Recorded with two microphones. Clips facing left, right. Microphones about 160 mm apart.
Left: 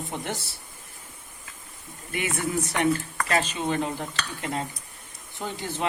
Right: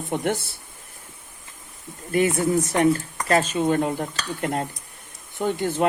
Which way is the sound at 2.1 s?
40° right (ahead or behind).